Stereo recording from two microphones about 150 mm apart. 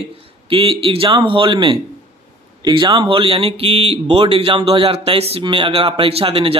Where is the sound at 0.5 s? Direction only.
35° right (ahead or behind).